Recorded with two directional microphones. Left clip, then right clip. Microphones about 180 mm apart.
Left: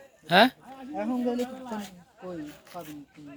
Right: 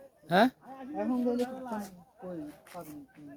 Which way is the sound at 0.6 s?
55° left (ahead or behind).